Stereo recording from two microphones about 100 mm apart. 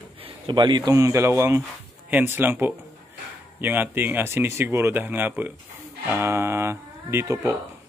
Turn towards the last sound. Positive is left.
turn(degrees=-30)  # may be behind; listen again after turning